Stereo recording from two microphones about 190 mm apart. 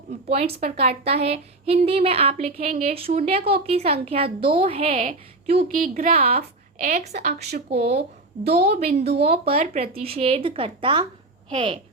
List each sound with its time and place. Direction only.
0.3 s a woman's voice: 30° right (ahead or behind)
5.8 s a woman's voice: 45° right (ahead or behind)
6.1 s a woman's voice: 30° right (ahead or behind)
7.1 s a woman's voice: 50° right (ahead or behind)
8.9 s a woman's voice: 35° right (ahead or behind)